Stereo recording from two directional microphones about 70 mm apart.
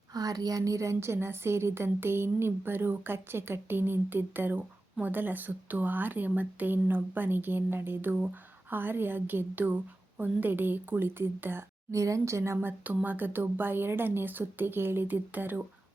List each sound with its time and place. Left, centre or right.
0.1 s a woman's voice: right
11.9 s a woman's voice: right